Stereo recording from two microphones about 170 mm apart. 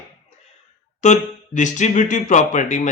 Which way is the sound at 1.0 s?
45° left (ahead or behind).